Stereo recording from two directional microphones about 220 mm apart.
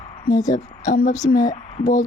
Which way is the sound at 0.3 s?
15° left (ahead or behind).